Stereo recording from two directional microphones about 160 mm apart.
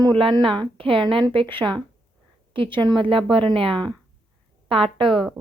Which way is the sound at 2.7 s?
30° right (ahead or behind).